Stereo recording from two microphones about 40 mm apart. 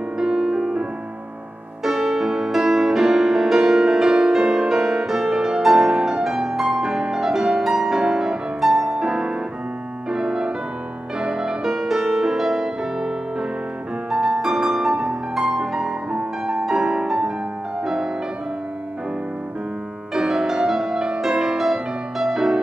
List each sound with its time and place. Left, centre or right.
0.2 s music: centre
1.9 s music: centre
14.1 s music: centre
20.2 s music: centre